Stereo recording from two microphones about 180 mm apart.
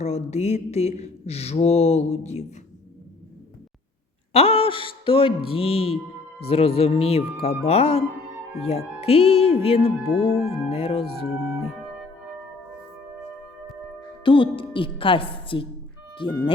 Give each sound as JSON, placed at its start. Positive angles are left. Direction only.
{"t": 0.0, "sound": "mantra", "side_deg": 40}
{"t": 4.3, "sound": "mantra", "side_deg": 35}
{"t": 14.3, "sound": "a woman's voice", "side_deg": 25}